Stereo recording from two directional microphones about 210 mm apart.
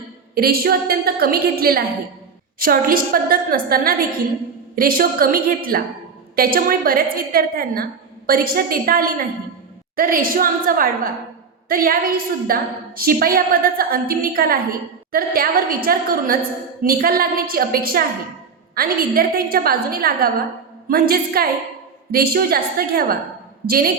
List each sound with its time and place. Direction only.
0.3 s a woman's voice: 45° right (ahead or behind)